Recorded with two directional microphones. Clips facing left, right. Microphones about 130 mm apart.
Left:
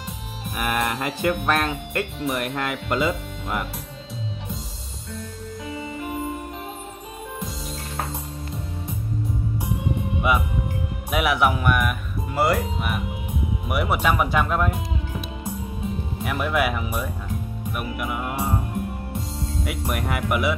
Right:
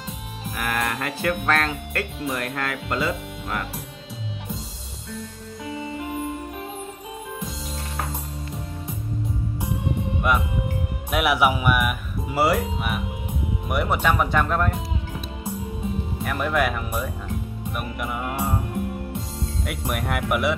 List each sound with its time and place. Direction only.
0.6 s music: 20° left (ahead or behind)
11.1 s speech: centre (ahead or behind)
19.6 s speech: centre (ahead or behind)